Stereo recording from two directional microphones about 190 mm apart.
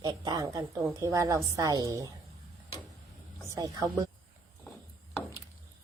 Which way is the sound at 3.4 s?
15° right (ahead or behind).